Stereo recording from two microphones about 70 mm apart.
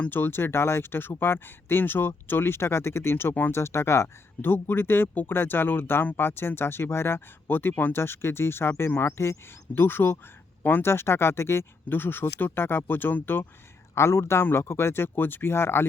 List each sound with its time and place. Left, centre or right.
0.1 s speech: left
4.4 s speech: left